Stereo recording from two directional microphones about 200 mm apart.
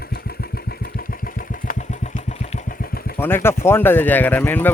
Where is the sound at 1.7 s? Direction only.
40° left (ahead or behind).